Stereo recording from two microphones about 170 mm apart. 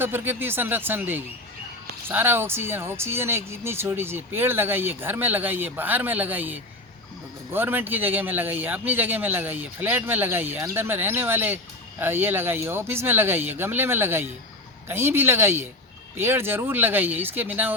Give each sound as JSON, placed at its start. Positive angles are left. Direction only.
{"t": 0.0, "sound": "speech", "side_deg": -10}